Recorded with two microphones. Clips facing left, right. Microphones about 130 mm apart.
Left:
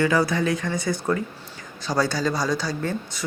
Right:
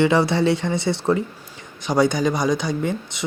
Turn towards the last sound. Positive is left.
turn(degrees=-20)  # may be behind; listen again after turning